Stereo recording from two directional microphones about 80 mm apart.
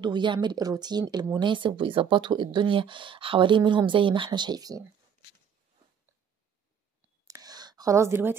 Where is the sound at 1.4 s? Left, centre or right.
Right.